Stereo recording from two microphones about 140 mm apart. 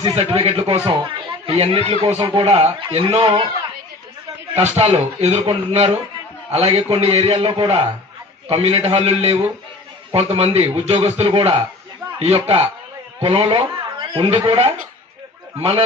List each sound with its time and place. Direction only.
0.0 s speech: 40° right (ahead or behind)
4.5 s speech: 50° right (ahead or behind)